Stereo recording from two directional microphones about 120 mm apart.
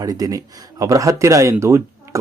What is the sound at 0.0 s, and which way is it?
Speech, 30° right (ahead or behind).